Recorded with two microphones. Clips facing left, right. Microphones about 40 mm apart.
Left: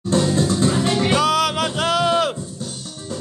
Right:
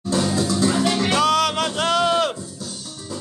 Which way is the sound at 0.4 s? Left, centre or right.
Left.